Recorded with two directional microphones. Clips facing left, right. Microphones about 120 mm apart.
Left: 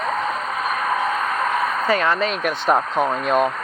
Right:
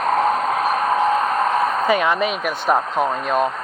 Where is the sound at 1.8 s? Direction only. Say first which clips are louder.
Right 2 dB; 15° right (ahead or behind); by 3.4 s centre (ahead or behind).